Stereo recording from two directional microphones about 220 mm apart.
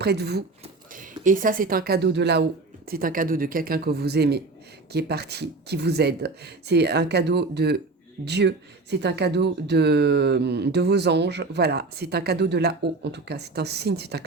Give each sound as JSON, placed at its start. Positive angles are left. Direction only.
{"t": 0.0, "sound": "speech", "side_deg": -50}
{"t": 0.9, "sound": "speech", "side_deg": -35}